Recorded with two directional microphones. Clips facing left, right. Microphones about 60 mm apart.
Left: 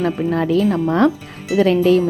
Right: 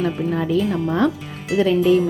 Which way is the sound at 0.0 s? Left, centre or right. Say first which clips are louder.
Left 3 dB; left.